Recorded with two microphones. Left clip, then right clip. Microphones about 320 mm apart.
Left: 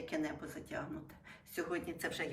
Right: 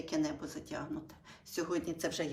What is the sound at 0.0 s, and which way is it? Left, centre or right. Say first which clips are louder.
Speech: right 4 dB; centre.